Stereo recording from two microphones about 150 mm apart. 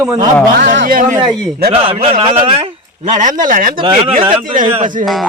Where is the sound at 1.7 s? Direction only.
40° right (ahead or behind); by 3.7 s 60° right (ahead or behind).